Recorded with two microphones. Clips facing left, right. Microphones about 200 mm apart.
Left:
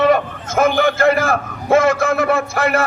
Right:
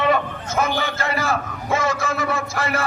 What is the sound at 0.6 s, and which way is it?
A man's voice, 50° left (ahead or behind).